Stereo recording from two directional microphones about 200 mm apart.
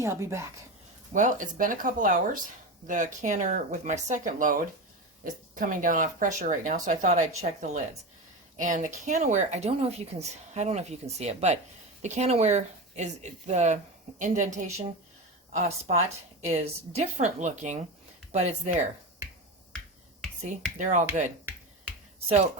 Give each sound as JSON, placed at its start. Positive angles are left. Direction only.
{"t": 0.0, "sound": "a woman's voice", "side_deg": -15}
{"t": 1.1, "sound": "speech", "side_deg": -40}
{"t": 20.4, "sound": "speech", "side_deg": -35}